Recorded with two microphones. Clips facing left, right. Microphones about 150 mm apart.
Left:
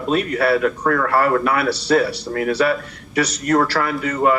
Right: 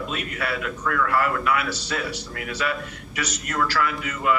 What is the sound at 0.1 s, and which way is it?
A man's voice, 35° left (ahead or behind).